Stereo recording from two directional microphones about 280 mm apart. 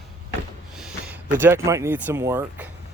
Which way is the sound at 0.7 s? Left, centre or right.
Centre.